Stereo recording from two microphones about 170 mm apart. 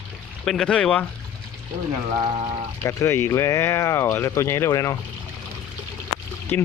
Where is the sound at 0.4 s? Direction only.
Centre (ahead or behind).